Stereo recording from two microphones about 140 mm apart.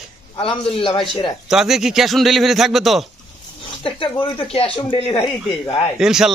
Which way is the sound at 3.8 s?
40° left (ahead or behind).